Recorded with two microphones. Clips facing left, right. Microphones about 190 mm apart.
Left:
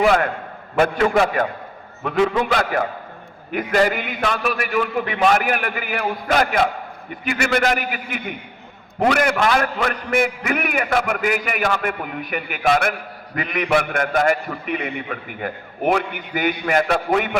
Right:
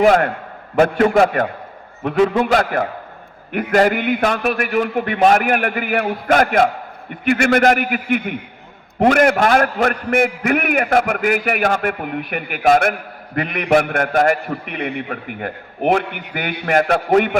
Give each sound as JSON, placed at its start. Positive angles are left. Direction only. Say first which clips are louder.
{"t": 0.0, "sound": "a man's voice", "louder": "right 4 dB", "side_deg": -45}